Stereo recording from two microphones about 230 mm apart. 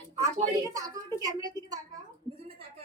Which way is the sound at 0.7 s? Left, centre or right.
Centre.